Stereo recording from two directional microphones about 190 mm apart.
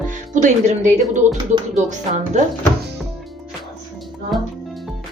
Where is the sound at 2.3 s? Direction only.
40° right (ahead or behind).